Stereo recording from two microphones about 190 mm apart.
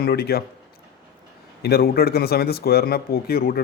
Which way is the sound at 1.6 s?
55° left (ahead or behind).